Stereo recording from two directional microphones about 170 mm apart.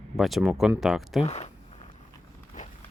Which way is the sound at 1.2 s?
40° left (ahead or behind).